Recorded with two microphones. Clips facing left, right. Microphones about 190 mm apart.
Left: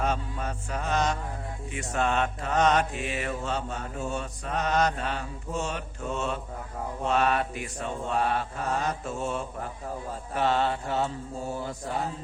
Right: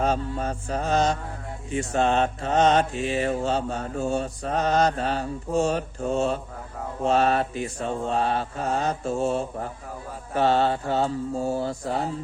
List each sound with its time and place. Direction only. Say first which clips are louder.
0.0 s mantra: right 5 dB; 35° right (ahead or behind)